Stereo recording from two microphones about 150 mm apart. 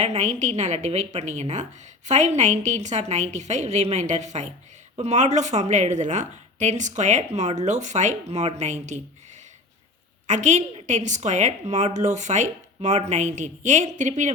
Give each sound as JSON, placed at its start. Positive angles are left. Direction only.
{"t": 0.0, "sound": "a woman's voice", "side_deg": -50}
{"t": 10.2, "sound": "a woman's voice", "side_deg": -50}